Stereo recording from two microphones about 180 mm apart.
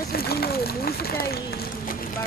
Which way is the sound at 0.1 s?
60° left (ahead or behind).